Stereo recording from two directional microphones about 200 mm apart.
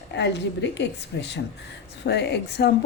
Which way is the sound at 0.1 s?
60° left (ahead or behind).